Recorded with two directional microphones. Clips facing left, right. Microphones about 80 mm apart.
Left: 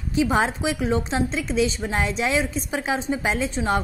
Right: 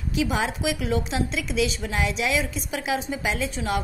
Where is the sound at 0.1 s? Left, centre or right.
Left.